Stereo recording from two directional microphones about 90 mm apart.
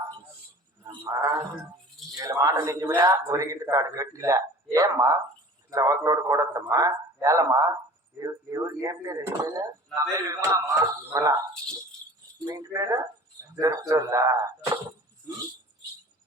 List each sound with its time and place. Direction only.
0.9 s roaring cats: 40° right (ahead or behind)
2.1 s speech: 40° right (ahead or behind)
12.5 s speech: 40° right (ahead or behind)